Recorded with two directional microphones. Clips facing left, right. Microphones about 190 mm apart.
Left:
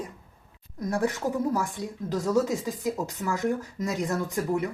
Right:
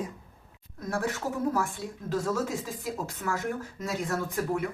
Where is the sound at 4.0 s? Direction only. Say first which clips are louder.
Left 2 dB; 20° left (ahead or behind).